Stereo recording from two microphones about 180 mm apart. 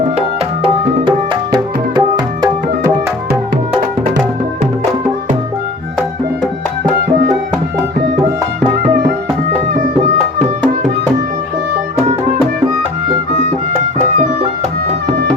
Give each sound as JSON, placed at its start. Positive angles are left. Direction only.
{"t": 0.2, "sound": "music", "side_deg": -30}